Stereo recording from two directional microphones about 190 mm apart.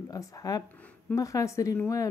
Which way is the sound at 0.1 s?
20° left (ahead or behind).